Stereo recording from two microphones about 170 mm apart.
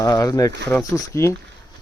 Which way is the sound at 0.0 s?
20° left (ahead or behind).